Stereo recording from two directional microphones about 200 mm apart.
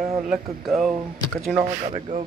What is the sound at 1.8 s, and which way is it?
Speech, 35° right (ahead or behind).